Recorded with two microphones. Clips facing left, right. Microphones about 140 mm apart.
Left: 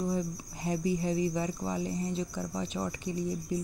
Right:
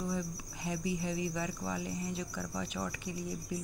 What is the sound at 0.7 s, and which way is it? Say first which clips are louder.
Speech: left 6 dB; 40° left (ahead or behind).